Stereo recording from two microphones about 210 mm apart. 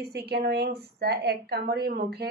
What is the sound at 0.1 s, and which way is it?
A woman's voice, 50° right (ahead or behind).